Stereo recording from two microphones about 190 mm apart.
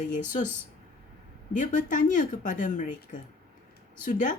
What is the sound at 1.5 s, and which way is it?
Speech, 45° left (ahead or behind).